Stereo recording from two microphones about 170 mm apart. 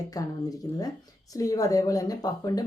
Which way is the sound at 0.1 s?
20° left (ahead or behind).